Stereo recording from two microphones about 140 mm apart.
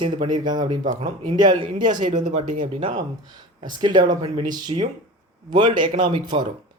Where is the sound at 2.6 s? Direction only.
40° right (ahead or behind).